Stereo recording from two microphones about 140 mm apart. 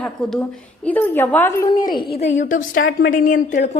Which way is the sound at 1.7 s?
30° left (ahead or behind).